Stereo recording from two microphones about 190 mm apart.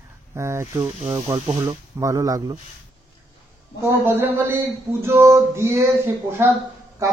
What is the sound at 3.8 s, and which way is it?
Speech, 15° right (ahead or behind).